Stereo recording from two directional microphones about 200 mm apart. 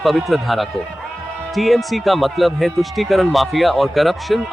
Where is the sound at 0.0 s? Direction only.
Centre (ahead or behind).